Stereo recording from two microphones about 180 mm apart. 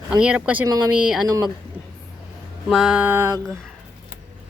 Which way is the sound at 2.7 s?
5° right (ahead or behind).